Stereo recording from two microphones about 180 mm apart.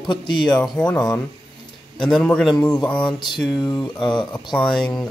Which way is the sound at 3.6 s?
25° left (ahead or behind).